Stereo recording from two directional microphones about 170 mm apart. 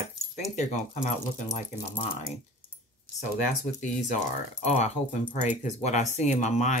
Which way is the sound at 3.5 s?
45° left (ahead or behind).